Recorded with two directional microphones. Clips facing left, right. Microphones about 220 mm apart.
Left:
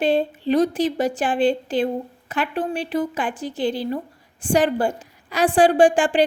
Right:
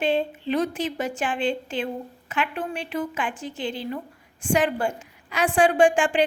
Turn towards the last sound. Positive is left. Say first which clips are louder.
# left 3 dB
turn(degrees=35)  # may be behind; listen again after turning